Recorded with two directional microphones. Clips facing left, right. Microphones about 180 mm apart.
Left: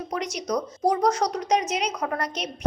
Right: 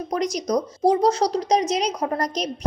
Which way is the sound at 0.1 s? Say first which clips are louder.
Right 5 dB; 40° right (ahead or behind).